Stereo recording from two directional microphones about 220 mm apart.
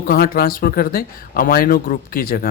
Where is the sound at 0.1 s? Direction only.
45° left (ahead or behind).